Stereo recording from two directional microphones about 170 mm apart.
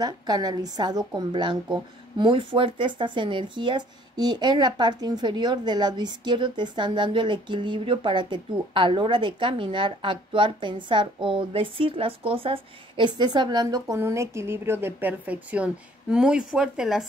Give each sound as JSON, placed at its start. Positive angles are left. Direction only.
{"t": 0.0, "sound": "speech", "side_deg": -25}